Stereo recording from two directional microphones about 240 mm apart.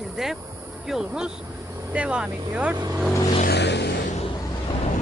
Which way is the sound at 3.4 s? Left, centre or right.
Left.